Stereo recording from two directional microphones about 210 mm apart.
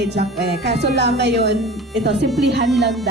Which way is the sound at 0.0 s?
55° right (ahead or behind).